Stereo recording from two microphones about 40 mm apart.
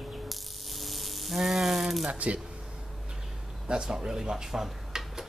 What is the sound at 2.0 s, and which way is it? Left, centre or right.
Speech, right.